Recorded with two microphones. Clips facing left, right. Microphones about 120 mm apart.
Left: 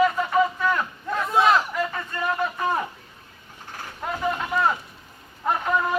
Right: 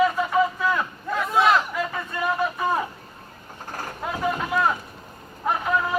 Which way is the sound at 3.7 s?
45° right (ahead or behind).